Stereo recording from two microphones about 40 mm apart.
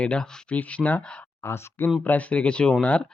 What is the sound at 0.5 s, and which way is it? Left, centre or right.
Speech, left.